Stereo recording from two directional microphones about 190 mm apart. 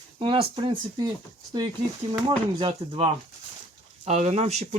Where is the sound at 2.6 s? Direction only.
30° right (ahead or behind).